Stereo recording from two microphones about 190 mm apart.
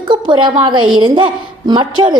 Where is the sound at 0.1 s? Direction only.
25° right (ahead or behind).